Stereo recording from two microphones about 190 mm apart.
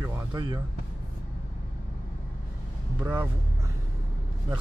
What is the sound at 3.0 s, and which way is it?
Speech, 15° right (ahead or behind).